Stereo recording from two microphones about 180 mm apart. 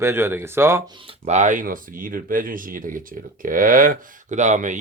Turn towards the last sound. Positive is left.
turn(degrees=-45)  # may be behind; listen again after turning